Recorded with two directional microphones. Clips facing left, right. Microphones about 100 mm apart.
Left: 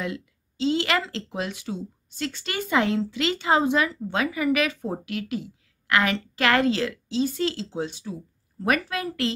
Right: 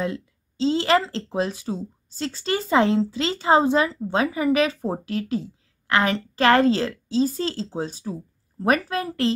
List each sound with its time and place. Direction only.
0.0 s a woman's voice: 30° right (ahead or behind)